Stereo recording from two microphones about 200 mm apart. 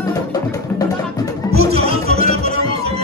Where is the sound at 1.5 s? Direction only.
30° right (ahead or behind).